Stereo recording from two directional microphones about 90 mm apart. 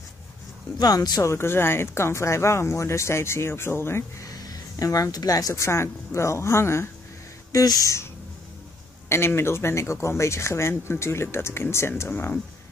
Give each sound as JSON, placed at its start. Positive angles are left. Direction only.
{"t": 0.7, "sound": "speech", "side_deg": 45}
{"t": 1.3, "sound": "speech", "side_deg": 30}
{"t": 4.3, "sound": "a sound", "side_deg": 40}
{"t": 5.5, "sound": "speech", "side_deg": 30}
{"t": 7.5, "sound": "speech", "side_deg": 40}
{"t": 9.1, "sound": "speech", "side_deg": 25}